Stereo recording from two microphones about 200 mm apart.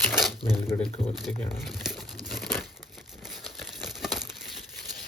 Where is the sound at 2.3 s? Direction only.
Centre (ahead or behind).